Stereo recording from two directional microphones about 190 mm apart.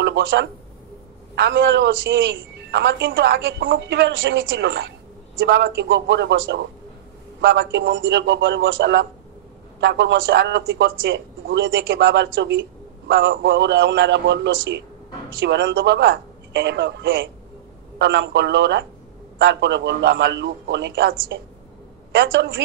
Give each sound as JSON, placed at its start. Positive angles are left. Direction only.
{"t": 0.0, "sound": "a man's voice", "side_deg": -75}
{"t": 17.9, "sound": "a man's voice", "side_deg": -65}